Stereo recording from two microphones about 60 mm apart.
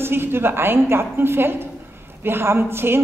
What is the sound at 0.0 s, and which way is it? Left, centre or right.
A woman's voice, right.